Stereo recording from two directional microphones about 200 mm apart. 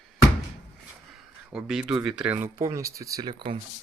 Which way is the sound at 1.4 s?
5° right (ahead or behind).